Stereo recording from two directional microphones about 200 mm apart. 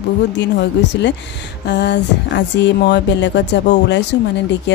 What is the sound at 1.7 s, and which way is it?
Music, 60° left (ahead or behind).